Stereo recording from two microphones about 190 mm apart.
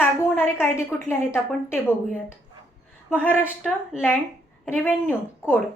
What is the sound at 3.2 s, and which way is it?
A woman's voice, 10° left (ahead or behind).